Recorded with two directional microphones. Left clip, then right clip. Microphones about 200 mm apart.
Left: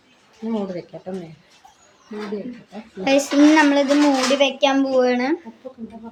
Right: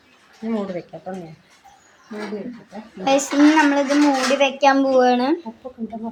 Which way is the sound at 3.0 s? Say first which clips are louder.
Left 1 dB; 20° left (ahead or behind).